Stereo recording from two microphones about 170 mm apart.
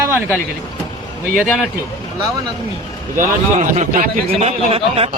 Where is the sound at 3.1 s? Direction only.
50° right (ahead or behind).